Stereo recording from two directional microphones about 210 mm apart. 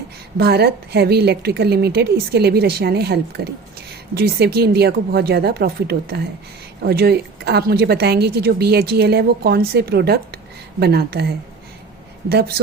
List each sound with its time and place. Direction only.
0.3 s a woman's voice: 50° right (ahead or behind)